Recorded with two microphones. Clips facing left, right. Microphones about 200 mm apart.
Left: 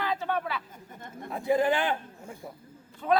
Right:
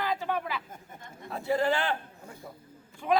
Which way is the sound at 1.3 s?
15° left (ahead or behind).